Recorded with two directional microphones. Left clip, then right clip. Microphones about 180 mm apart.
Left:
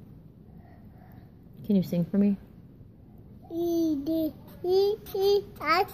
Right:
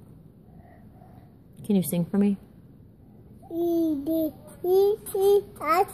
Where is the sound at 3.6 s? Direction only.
15° right (ahead or behind).